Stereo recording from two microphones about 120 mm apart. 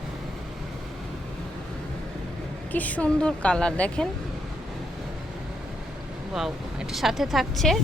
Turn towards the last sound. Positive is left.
turn(degrees=0)  # may be behind; listen again after turning